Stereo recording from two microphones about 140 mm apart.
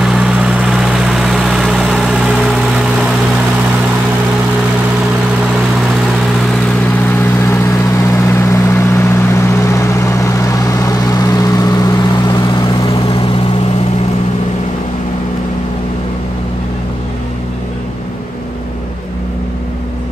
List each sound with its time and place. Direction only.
0.0 s vehicle: 5° right (ahead or behind)
7.2 s vehicle: 20° left (ahead or behind); by 13.3 s 35° left (ahead or behind)